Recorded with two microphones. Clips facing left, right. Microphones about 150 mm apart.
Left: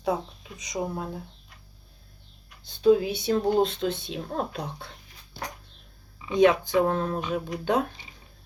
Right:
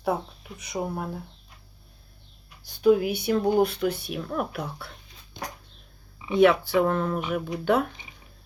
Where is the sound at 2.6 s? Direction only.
20° left (ahead or behind).